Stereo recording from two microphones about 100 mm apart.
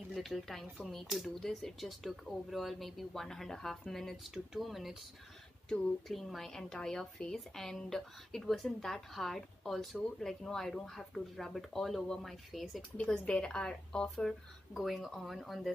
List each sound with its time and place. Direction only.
0.1 s speech: centre (ahead or behind)